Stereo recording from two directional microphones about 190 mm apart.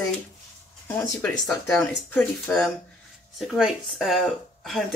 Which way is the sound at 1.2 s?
5° left (ahead or behind).